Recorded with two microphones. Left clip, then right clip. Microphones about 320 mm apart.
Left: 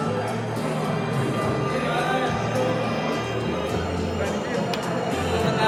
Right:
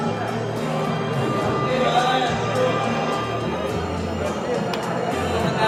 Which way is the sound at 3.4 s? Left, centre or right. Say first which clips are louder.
Right 1 dB; centre.